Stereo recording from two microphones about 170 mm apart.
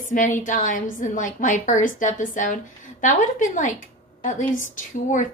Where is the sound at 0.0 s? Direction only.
50° left (ahead or behind).